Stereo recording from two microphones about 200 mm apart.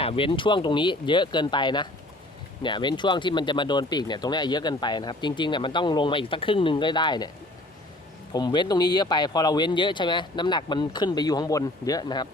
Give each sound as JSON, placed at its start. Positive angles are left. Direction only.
{"t": 0.0, "sound": "speech", "side_deg": 25}
{"t": 8.3, "sound": "speech", "side_deg": 20}